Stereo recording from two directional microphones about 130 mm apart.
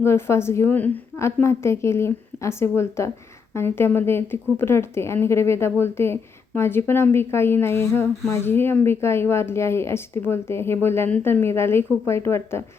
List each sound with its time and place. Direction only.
0.0 s speech: 20° left (ahead or behind)